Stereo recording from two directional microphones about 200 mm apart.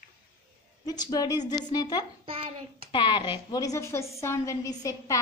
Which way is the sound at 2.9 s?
20° left (ahead or behind).